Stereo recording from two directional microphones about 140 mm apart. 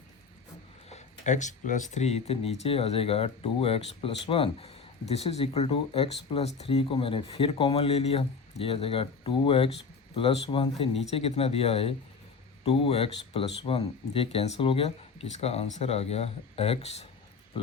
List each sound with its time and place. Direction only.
0.9 s speech: 55° left (ahead or behind)